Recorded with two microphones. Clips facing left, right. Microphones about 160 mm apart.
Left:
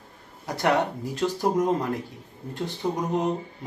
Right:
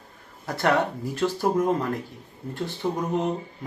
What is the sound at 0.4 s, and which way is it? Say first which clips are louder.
Speech: even; 15° left (ahead or behind).